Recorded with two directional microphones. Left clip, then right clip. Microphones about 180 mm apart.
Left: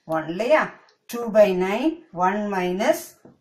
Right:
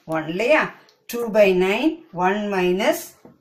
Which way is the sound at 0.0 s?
20° right (ahead or behind).